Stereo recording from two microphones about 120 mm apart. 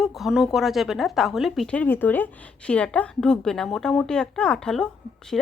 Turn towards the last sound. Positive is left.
turn(degrees=5)  # may be behind; listen again after turning